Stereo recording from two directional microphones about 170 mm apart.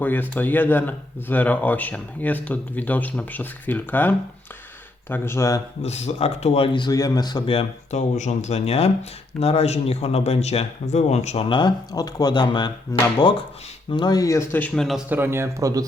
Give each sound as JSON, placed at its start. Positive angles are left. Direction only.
{"t": 0.0, "sound": "speech", "side_deg": 10}
{"t": 5.8, "sound": "speech", "side_deg": 40}
{"t": 11.4, "sound": "speech", "side_deg": 25}
{"t": 15.1, "sound": "a man's voice", "side_deg": -15}